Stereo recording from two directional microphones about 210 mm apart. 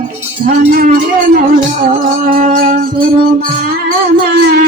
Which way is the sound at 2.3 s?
40° right (ahead or behind).